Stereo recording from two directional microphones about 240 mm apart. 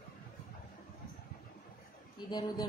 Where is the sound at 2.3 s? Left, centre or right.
Centre.